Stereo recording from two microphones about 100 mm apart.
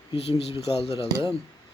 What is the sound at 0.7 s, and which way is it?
Speech, 80° left.